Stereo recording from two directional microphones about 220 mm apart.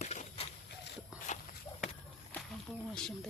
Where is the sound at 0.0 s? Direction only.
30° left (ahead or behind).